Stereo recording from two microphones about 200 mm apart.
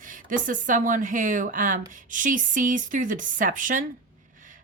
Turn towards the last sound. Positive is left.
turn(degrees=-40)  # may be behind; listen again after turning